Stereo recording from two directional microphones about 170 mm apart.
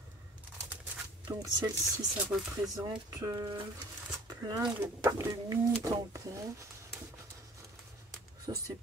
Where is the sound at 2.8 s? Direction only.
20° right (ahead or behind).